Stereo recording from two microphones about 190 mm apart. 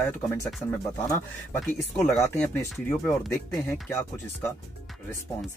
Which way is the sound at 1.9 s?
10° left (ahead or behind).